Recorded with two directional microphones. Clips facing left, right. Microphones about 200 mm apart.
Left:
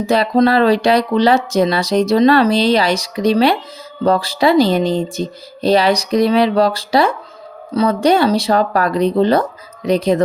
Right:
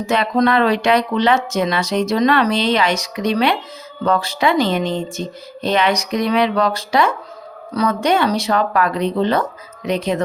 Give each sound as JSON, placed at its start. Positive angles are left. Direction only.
{"t": 0.0, "sound": "speech", "side_deg": 35}